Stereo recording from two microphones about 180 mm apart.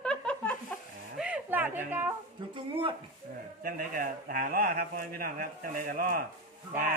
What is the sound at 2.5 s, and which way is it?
Speech, 30° right (ahead or behind).